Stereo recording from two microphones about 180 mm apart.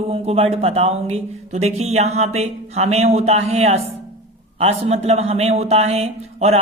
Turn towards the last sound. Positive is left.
turn(degrees=-35)  # may be behind; listen again after turning